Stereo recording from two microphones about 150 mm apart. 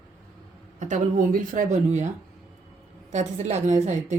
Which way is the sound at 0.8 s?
55° right (ahead or behind).